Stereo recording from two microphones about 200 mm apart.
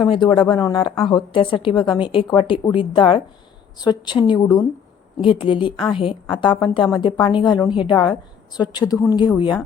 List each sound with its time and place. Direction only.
0.0 s a woman's voice: 25° left (ahead or behind)